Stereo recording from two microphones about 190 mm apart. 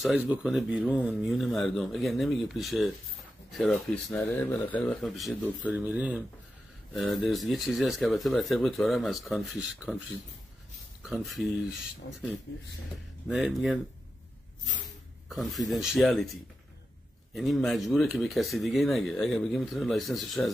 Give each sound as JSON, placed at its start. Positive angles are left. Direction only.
{"t": 0.0, "sound": "speech", "side_deg": -5}
{"t": 12.5, "sound": "speech", "side_deg": 65}
{"t": 13.3, "sound": "speech", "side_deg": 0}
{"t": 15.2, "sound": "speech", "side_deg": 0}
{"t": 17.3, "sound": "speech", "side_deg": 0}